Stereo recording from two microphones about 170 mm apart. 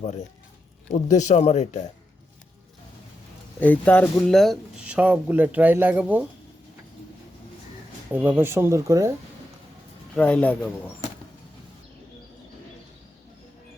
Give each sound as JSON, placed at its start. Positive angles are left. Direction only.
{"t": 1.0, "sound": "speech", "side_deg": 45}
{"t": 3.6, "sound": "speech", "side_deg": 10}
{"t": 8.1, "sound": "speech", "side_deg": -10}
{"t": 10.2, "sound": "speech", "side_deg": 10}